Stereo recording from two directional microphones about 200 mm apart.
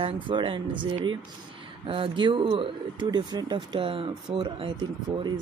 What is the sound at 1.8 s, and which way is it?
Speech, 25° right (ahead or behind).